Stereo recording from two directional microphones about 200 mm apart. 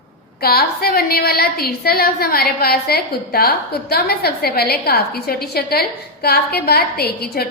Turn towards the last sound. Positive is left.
turn(degrees=50)  # may be behind; listen again after turning